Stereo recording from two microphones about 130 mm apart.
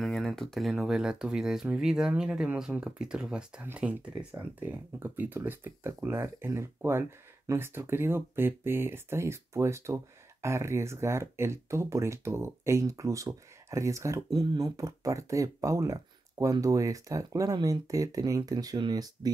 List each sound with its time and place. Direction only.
0.0 s speech: centre (ahead or behind); by 19.3 s 30° right (ahead or behind)